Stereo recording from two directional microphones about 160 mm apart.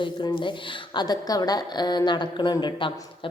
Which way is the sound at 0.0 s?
30° left (ahead or behind).